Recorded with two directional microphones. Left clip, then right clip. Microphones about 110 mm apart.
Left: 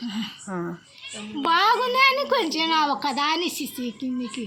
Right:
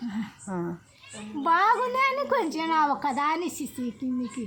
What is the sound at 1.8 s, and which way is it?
A child's voice, 50° right (ahead or behind).